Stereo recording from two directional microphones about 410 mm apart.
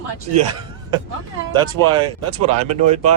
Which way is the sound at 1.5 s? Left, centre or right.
Centre.